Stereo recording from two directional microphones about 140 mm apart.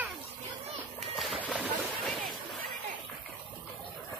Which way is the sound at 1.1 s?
Centre (ahead or behind).